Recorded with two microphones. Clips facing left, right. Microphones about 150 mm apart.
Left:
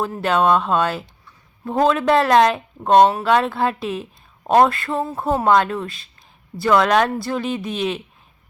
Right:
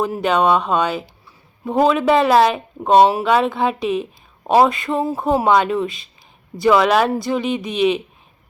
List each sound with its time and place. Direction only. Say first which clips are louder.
0.0 s a woman's voice: right 1 dB; centre (ahead or behind)